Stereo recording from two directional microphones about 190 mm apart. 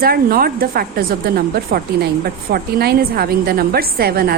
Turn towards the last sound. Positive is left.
turn(degrees=-50)  # may be behind; listen again after turning